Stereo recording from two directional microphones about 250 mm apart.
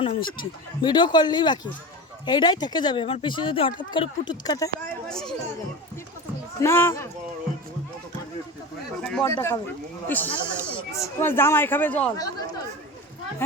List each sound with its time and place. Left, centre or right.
0.0 s speech: centre
5.0 s speech: centre
6.6 s speech: centre
9.0 s speech: centre
10.4 s a sound: centre
11.2 s speech: centre